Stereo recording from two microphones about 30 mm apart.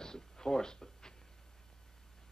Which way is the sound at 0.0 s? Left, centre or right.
Left.